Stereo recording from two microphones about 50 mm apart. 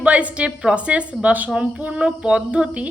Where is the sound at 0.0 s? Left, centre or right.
Right.